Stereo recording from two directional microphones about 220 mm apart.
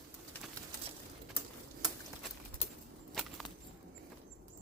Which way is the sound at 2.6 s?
30° left (ahead or behind).